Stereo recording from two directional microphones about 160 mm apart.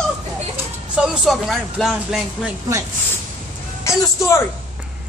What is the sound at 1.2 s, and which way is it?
Speech, centre (ahead or behind).